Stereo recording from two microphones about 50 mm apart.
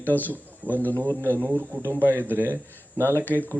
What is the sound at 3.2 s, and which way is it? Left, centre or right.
Speech, left.